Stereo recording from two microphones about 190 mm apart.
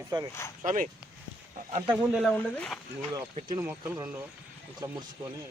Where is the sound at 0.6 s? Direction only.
40° right (ahead or behind).